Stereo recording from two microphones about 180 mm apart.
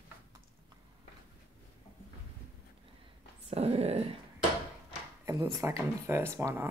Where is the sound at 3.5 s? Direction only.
35° right (ahead or behind).